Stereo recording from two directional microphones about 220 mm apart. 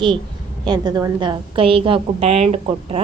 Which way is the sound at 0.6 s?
20° right (ahead or behind).